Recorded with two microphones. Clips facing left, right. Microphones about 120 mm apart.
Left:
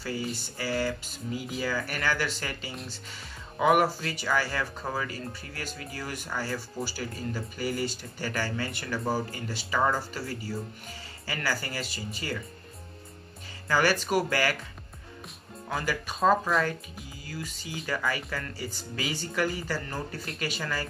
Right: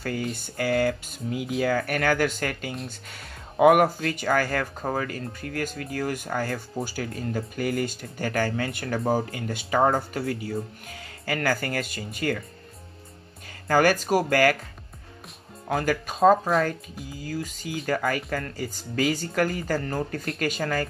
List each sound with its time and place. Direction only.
0.4 s speech: 55° right (ahead or behind)
13.7 s speech: 45° right (ahead or behind)
15.7 s speech: 45° right (ahead or behind)